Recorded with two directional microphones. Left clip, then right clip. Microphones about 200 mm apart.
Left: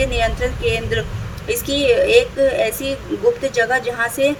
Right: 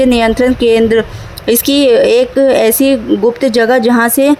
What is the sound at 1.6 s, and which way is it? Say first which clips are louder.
Speech: right 7 dB; 50° right (ahead or behind).